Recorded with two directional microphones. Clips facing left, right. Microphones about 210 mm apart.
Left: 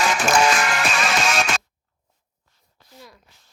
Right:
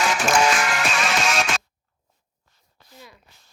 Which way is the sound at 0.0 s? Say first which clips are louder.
Left 1 dB; 45° left (ahead or behind).